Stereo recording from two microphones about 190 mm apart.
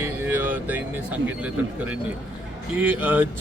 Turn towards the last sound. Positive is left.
turn(degrees=-10)  # may be behind; listen again after turning